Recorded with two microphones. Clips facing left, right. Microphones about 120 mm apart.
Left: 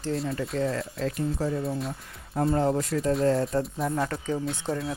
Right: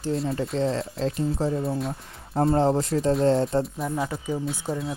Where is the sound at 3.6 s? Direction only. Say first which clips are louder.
Right 1 dB; centre (ahead or behind).